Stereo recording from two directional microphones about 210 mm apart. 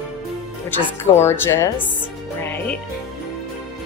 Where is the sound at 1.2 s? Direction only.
10° left (ahead or behind).